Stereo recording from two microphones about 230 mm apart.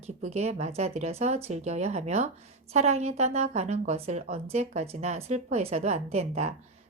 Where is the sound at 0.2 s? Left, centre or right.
Right.